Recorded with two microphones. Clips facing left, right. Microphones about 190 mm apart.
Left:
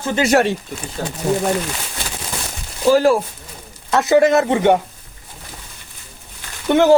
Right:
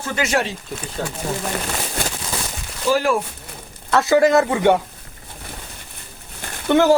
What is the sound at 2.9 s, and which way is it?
Speech, 40° left (ahead or behind).